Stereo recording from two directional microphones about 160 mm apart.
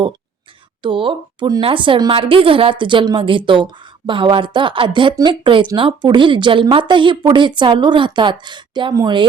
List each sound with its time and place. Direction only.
0.8 s a woman's voice: 30° right (ahead or behind)